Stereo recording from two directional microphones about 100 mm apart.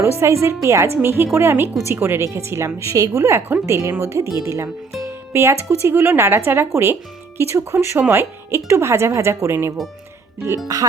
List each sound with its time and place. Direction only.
0.0 s speech: 25° right (ahead or behind)
5.0 s music: 25° right (ahead or behind)
5.6 s speech: 20° right (ahead or behind)